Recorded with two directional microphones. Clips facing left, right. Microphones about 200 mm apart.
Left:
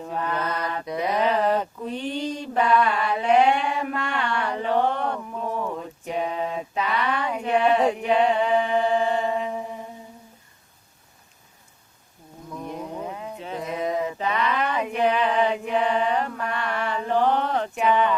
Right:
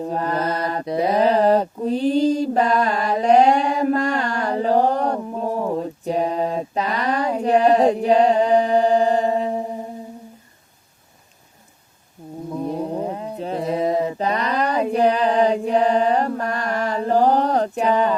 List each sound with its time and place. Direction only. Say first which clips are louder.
0.0 s mantra: right 5 dB; 35° right (ahead or behind)
12.5 s mantra: right 8 dB; 35° right (ahead or behind)